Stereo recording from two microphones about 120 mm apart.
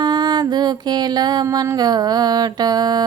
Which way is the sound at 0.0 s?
40° right (ahead or behind).